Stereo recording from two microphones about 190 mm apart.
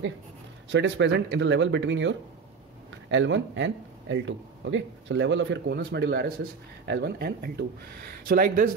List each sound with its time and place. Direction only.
0.7 s a man's voice: 70° right (ahead or behind); by 8.7 s 50° right (ahead or behind)